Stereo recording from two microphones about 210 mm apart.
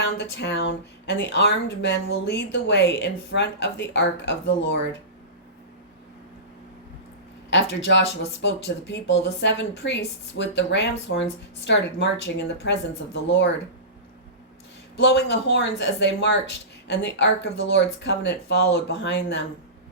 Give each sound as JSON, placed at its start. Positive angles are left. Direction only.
{"t": 0.0, "sound": "speech", "side_deg": 55}
{"t": 7.5, "sound": "speech", "side_deg": 55}
{"t": 14.9, "sound": "speech", "side_deg": 55}